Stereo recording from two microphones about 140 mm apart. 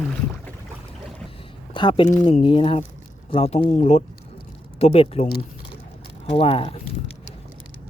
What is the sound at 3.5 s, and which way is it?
Speech, 55° left (ahead or behind).